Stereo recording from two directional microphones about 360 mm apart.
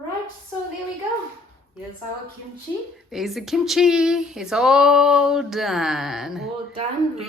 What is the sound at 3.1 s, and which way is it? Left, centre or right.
Speech, centre.